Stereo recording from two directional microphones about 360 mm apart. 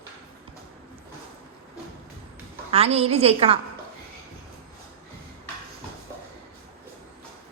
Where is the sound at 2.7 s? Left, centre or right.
Centre.